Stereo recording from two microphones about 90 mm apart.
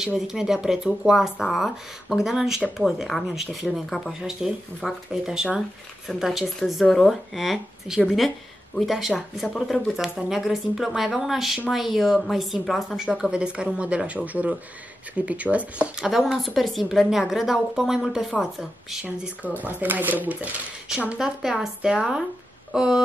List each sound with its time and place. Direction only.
0.0 s a woman's voice: 5° right (ahead or behind)
16.1 s a woman's voice: centre (ahead or behind)
19.6 s speech: 20° right (ahead or behind)